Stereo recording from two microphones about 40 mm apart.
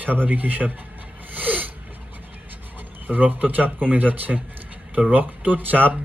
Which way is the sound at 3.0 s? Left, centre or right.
Right.